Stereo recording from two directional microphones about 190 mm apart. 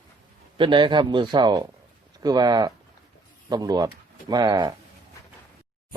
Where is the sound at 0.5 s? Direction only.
25° right (ahead or behind).